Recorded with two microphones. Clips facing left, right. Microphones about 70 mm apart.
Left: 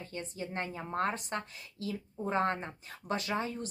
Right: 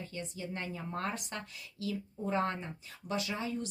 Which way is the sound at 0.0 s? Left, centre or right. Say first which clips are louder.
Left 1 dB; left.